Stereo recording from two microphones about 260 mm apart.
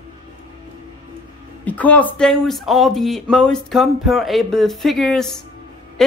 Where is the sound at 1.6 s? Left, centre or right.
Centre.